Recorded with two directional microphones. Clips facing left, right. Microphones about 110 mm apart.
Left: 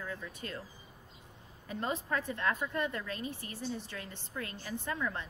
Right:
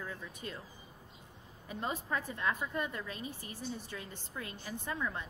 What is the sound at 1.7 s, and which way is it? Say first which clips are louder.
Speech: left 2 dB; 10° right (ahead or behind).